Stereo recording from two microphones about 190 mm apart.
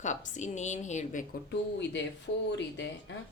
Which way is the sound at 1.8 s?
65° left (ahead or behind).